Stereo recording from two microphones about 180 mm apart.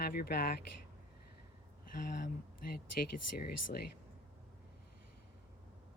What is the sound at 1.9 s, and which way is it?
Speech, 50° left (ahead or behind).